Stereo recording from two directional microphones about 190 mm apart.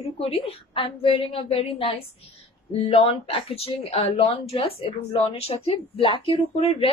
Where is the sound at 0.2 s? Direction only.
30° left (ahead or behind).